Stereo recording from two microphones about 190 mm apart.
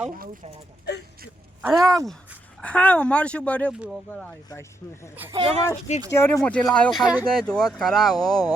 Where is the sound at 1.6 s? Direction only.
Centre (ahead or behind).